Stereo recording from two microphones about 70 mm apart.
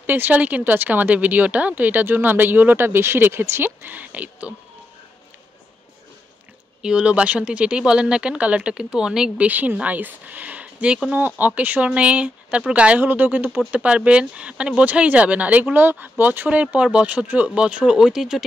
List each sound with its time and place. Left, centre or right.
0.0 s speech: right
6.8 s speech: centre
9.5 s speech: right; by 18.4 s centre